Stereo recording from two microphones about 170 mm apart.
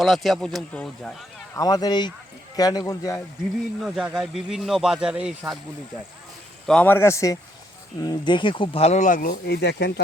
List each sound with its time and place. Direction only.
0.0 s speech: centre (ahead or behind)
1.5 s speech: 20° left (ahead or behind)
3.8 s speech: 5° right (ahead or behind)
6.7 s speech: 10° left (ahead or behind); by 9.3 s 50° left (ahead or behind)
9.3 s speech: 80° left